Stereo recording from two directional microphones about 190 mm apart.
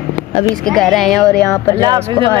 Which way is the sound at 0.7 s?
Centre (ahead or behind).